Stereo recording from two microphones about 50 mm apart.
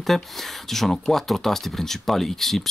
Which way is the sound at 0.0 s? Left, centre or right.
Centre.